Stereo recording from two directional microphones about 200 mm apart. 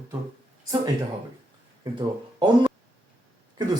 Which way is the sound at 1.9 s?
20° right (ahead or behind).